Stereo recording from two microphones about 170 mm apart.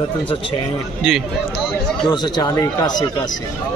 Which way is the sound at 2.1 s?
25° left (ahead or behind).